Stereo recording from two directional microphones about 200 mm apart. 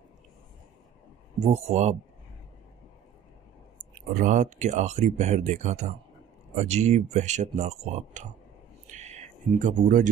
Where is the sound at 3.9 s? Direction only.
40° right (ahead or behind).